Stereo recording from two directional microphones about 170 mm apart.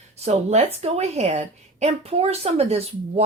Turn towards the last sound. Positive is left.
turn(degrees=-35)  # may be behind; listen again after turning